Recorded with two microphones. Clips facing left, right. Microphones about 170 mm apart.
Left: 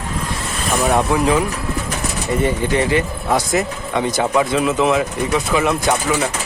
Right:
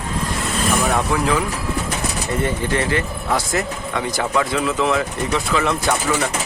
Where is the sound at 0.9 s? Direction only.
20° left (ahead or behind).